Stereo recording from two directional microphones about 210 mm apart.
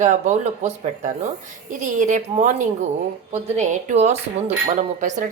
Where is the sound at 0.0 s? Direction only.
35° right (ahead or behind).